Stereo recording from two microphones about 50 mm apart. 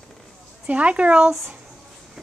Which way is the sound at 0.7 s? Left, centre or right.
Right.